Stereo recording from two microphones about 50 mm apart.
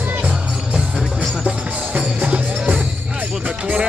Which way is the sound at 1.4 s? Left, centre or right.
Right.